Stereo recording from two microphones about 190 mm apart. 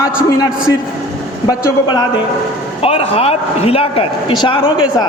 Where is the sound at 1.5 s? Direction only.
20° left (ahead or behind).